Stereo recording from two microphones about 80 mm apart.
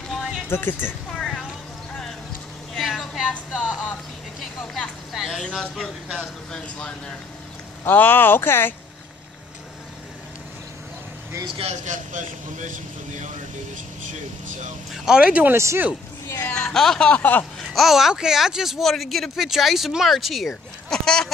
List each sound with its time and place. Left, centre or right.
0.1 s a sound: centre
0.5 s speech: left
1.1 s a sound: centre
2.7 s a sound: centre
3.5 s music: centre
4.4 s vehicle: centre
5.1 s speech: centre
7.8 s speech: left
14.9 s speech: centre
15.5 s speech: right
16.3 s speech: left
16.5 s speech: centre
17.2 s speech: left
17.6 s speech: centre